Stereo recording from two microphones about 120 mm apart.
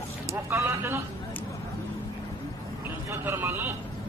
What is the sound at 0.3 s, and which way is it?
Vehicle, 25° right (ahead or behind).